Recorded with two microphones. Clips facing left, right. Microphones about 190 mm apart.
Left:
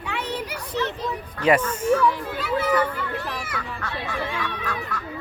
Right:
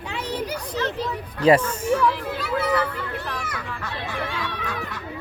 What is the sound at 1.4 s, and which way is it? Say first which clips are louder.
Speech: right 3 dB; 30° right (ahead or behind).